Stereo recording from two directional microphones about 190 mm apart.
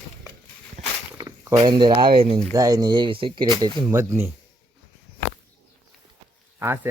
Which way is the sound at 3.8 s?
15° right (ahead or behind).